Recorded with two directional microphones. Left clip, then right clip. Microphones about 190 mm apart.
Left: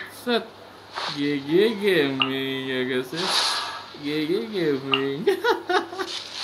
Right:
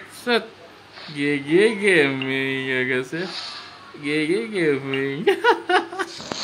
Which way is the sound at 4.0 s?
5° right (ahead or behind).